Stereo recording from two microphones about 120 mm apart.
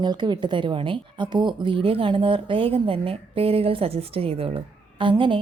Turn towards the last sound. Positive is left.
turn(degrees=-45)  # may be behind; listen again after turning